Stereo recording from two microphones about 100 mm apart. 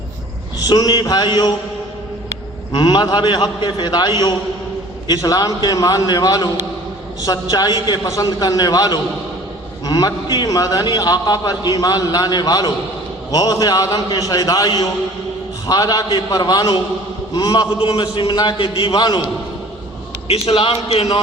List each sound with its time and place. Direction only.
0.6 s a man's voice: 40° left (ahead or behind)
2.7 s a man's voice: 50° left (ahead or behind)
17.7 s a man's voice: 60° left (ahead or behind)
18.9 s a man's voice: 45° left (ahead or behind)
20.2 s speech: 80° left